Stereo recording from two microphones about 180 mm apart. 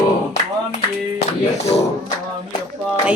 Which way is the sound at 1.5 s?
35° left (ahead or behind).